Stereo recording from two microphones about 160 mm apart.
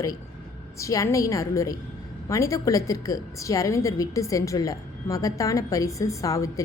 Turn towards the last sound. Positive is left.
turn(degrees=20)  # may be behind; listen again after turning